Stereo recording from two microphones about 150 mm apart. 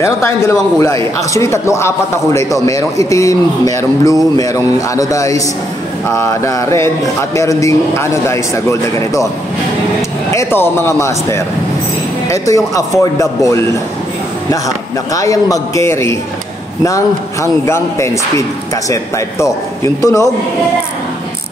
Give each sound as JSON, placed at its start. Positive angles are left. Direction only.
{"t": 0.0, "sound": "a man's voice", "side_deg": 20}
{"t": 10.3, "sound": "a man's voice", "side_deg": 15}
{"t": 15.1, "sound": "a man's voice", "side_deg": 20}